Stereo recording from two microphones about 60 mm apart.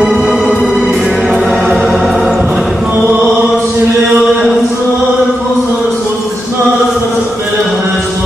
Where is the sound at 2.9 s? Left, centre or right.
Right.